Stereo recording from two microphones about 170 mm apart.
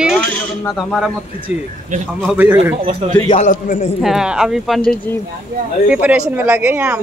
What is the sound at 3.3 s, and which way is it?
Speech, 45° left (ahead or behind).